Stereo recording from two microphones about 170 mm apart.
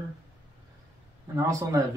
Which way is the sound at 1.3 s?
20° right (ahead or behind).